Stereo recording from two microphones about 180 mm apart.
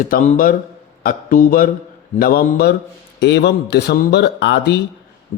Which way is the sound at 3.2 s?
70° left (ahead or behind).